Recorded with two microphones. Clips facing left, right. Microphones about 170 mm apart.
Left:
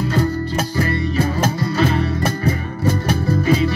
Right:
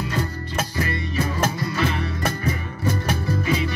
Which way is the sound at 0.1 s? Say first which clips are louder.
Left 8 dB; 30° left (ahead or behind).